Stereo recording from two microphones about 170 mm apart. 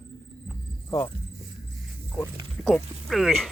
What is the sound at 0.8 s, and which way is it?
Speech, 10° left (ahead or behind).